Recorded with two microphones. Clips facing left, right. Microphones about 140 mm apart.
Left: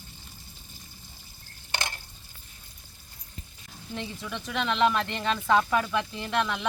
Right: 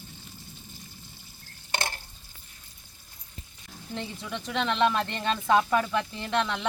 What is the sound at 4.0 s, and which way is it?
Speech, 20° right (ahead or behind).